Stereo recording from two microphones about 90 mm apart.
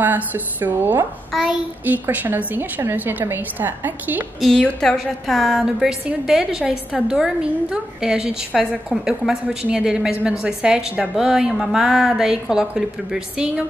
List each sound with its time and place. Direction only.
0.0 s a woman's voice: 20° right (ahead or behind)
4.4 s a woman's voice: centre (ahead or behind)